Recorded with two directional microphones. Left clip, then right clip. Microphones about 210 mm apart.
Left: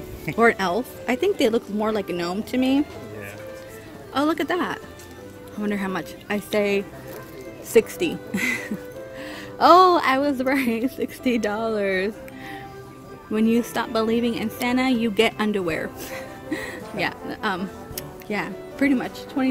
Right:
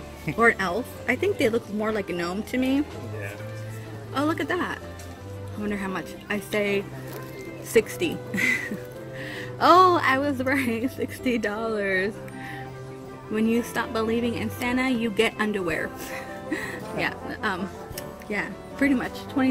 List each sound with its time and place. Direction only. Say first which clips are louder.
0.4 s a woman's voice: left 2 dB; 25° left (ahead or behind)
4.1 s a woman's voice: left 3 dB; 20° left (ahead or behind)
13.3 s a woman's voice: left 3 dB; 15° left (ahead or behind)